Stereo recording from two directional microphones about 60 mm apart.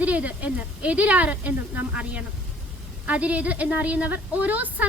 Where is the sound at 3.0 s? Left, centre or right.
Right.